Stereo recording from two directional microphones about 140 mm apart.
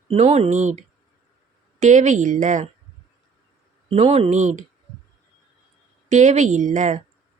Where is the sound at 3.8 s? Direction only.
50° right (ahead or behind).